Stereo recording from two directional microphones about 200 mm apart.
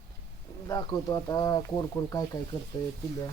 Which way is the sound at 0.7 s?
20° left (ahead or behind).